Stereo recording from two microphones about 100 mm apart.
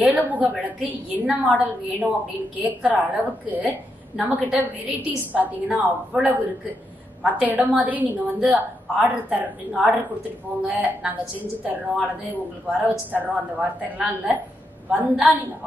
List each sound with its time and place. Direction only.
0.0 s a woman's voice: 15° right (ahead or behind)